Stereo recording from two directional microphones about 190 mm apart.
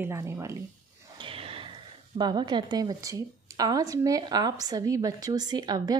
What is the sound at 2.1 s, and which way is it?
A woman's voice, 20° right (ahead or behind).